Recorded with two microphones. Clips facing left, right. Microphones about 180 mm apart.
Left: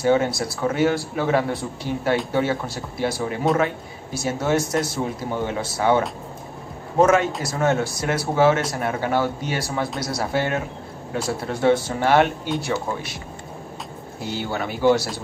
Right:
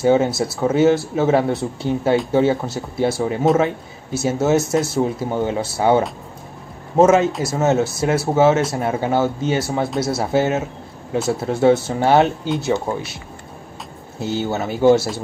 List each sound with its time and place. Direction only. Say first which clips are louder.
0.0 s speech: right 4 dB; 25° right (ahead or behind)
14.2 s speech: right 5 dB; 25° right (ahead or behind)